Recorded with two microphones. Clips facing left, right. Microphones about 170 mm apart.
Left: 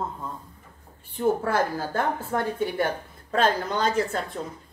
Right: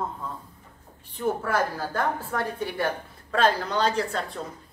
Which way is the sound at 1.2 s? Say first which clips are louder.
Left 2 dB; 25° left (ahead or behind).